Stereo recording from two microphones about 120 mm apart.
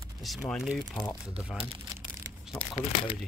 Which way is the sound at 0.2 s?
Centre (ahead or behind).